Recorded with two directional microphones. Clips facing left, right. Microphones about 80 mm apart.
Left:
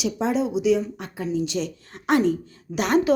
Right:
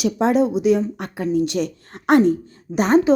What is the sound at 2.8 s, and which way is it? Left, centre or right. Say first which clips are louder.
Speech: right 5 dB; right.